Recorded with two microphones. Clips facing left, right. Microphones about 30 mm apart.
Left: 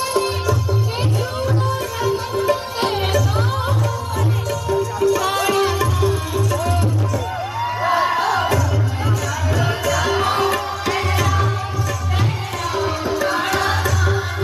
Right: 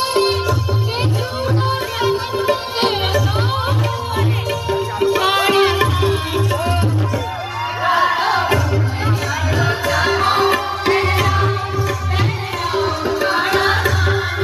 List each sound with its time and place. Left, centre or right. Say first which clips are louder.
0.1 s music: right 2 dB; right
2.0 s music: right 1 dB; right
4.6 s music: left 1 dB; right
8.2 s music: right 2 dB; right
12.7 s tabla: right 2 dB; right